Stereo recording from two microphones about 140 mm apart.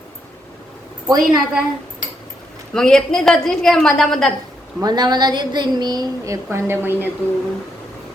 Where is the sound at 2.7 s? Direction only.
5° left (ahead or behind).